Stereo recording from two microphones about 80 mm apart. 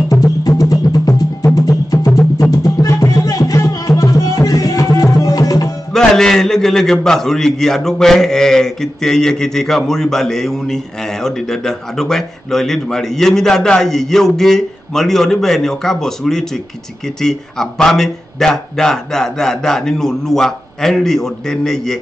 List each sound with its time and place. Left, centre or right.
0.1 s music: left
5.9 s a man's voice: centre